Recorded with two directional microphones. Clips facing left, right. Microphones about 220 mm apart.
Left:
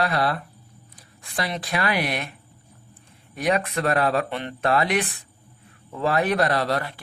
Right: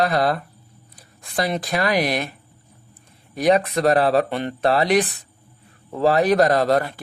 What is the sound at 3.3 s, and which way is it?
Speech, 35° right (ahead or behind).